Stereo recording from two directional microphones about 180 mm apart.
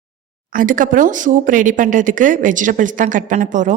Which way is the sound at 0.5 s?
50° right (ahead or behind).